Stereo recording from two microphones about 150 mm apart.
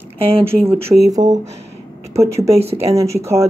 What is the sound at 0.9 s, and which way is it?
Speech, 15° right (ahead or behind).